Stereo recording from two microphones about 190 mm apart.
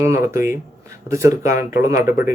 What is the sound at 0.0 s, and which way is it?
A man's voice, 15° right (ahead or behind).